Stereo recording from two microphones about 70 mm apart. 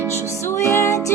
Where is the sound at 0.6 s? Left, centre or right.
Left.